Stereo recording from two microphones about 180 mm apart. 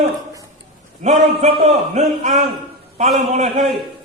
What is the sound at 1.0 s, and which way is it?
A man's voice, 40° right (ahead or behind).